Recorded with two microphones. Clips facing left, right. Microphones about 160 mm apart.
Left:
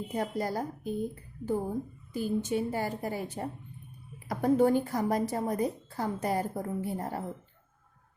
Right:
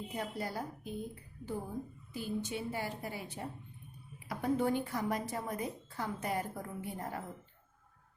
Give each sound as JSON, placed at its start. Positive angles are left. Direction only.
{"t": 0.1, "sound": "a woman's voice", "side_deg": 40}
{"t": 2.1, "sound": "a woman's voice", "side_deg": 45}